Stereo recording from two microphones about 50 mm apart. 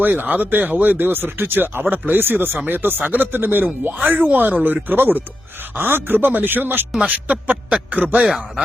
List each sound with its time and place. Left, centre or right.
0.0 s speech: right
7.0 s a man's voice: right